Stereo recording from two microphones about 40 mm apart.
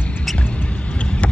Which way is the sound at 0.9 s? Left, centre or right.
Left.